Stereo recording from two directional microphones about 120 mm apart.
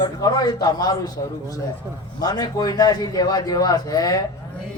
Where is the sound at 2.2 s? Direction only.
35° left (ahead or behind).